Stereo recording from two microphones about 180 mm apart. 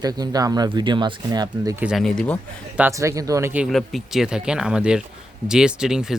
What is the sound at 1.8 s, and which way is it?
Speech, centre (ahead or behind).